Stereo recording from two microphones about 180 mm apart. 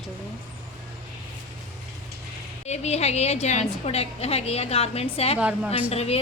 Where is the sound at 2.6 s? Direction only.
35° left (ahead or behind).